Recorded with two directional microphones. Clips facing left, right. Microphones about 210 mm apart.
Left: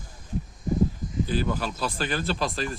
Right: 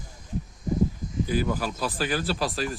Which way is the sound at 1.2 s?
10° right (ahead or behind).